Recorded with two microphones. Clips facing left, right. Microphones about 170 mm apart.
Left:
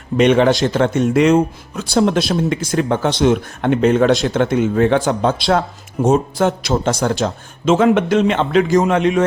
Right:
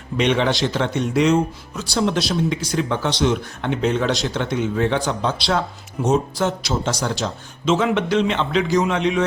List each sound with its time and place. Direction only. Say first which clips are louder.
0.2 s speech: left 6 dB; 50° left (ahead or behind)